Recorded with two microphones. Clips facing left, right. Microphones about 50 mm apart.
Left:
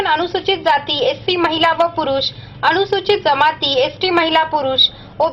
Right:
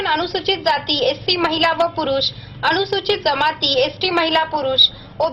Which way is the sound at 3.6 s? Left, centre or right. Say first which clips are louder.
Left 2 dB; left.